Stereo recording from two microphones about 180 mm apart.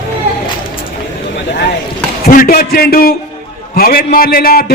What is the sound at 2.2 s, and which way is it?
A man's voice, 55° left (ahead or behind).